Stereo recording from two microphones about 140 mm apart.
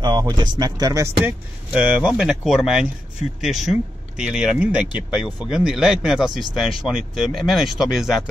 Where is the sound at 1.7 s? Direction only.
10° right (ahead or behind).